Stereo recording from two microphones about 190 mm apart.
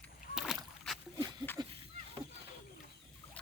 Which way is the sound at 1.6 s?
25° right (ahead or behind).